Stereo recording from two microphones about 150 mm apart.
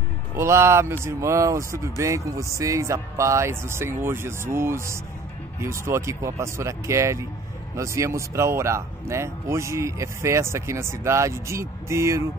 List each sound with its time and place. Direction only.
0.4 s speech: 15° right (ahead or behind)